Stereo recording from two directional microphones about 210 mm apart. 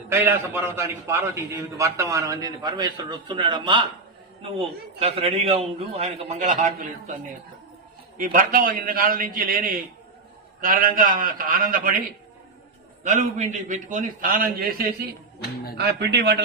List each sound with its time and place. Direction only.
0.1 s a man's voice: 10° right (ahead or behind)
4.9 s a man's voice: 30° right (ahead or behind)
8.2 s a man's voice: 40° right (ahead or behind)
13.1 s a man's voice: 35° right (ahead or behind); by 16.4 s 55° right (ahead or behind)